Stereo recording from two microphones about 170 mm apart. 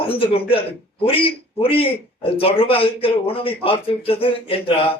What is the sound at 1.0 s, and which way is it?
A man's voice, 35° left (ahead or behind).